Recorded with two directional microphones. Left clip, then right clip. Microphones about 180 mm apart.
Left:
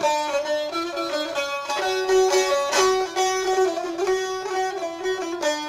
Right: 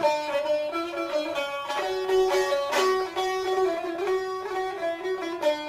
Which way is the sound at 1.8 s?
40° left (ahead or behind).